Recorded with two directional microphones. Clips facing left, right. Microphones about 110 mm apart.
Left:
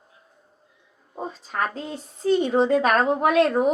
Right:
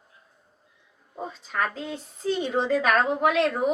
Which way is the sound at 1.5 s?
35° left (ahead or behind).